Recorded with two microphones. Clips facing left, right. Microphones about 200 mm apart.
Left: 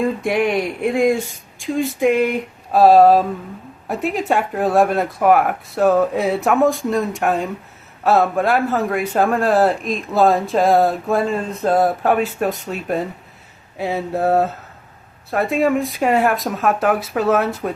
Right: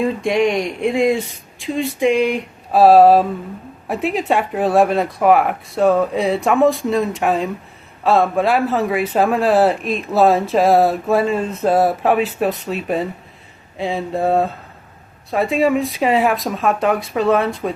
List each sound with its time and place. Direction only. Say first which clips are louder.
0.0 s speech: right 2 dB; 5° left (ahead or behind)